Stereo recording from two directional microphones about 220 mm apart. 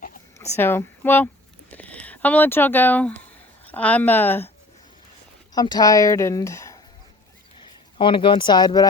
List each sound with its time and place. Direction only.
0.5 s speech: 10° left (ahead or behind)
5.5 s speech: 20° left (ahead or behind)
7.9 s speech: 20° left (ahead or behind)